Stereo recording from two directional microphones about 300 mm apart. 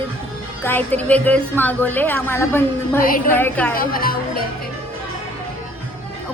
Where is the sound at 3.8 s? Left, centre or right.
Left.